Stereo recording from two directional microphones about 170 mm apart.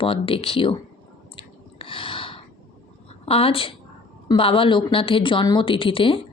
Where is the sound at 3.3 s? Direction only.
35° left (ahead or behind).